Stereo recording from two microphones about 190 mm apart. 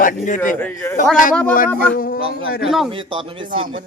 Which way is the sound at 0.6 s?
10° left (ahead or behind).